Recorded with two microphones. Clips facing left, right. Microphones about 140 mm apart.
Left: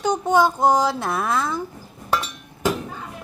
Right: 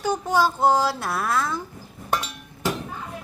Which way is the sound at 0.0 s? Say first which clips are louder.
Left 3 dB; 20° left (ahead or behind).